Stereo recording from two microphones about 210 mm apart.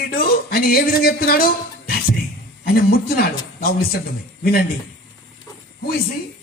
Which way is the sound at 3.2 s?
45° left (ahead or behind).